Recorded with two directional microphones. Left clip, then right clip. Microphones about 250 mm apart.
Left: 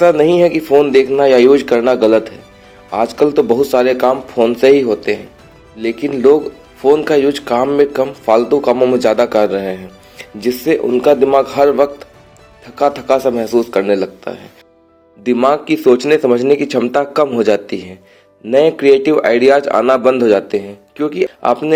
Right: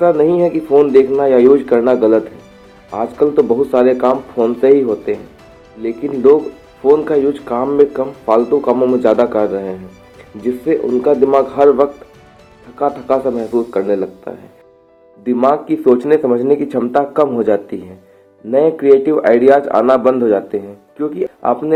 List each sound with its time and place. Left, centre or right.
0.0 s a man's voice: left